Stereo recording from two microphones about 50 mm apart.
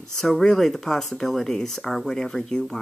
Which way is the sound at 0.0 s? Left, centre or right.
Centre.